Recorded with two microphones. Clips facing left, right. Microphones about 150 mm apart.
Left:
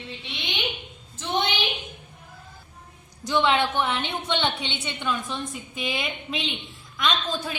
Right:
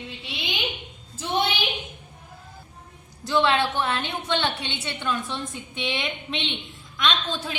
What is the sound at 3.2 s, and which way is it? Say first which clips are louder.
A woman's voice: even; 15° left (ahead or behind).